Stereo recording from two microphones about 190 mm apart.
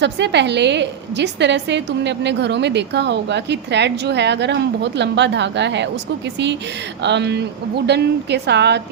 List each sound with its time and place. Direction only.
0.0 s a woman's voice: 65° right (ahead or behind)